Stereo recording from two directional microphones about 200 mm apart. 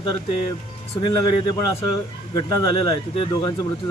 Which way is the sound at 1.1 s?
20° left (ahead or behind).